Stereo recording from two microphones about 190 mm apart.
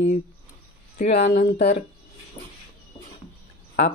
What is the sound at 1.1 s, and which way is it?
Speech, 65° left (ahead or behind).